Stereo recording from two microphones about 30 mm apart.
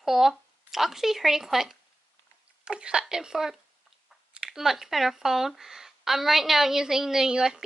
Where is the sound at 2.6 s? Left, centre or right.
Right.